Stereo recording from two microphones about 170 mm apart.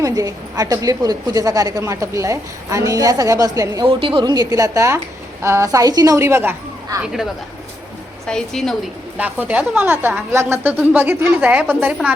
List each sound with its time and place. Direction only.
0.0 s a woman's voice: 20° right (ahead or behind)
8.3 s a woman's voice: 5° left (ahead or behind)
9.1 s a woman's voice: 10° right (ahead or behind)